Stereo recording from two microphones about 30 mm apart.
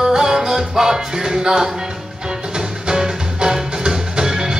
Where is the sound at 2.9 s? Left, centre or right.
Right.